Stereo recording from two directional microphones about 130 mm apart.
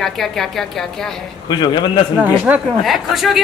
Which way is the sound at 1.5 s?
35° left (ahead or behind).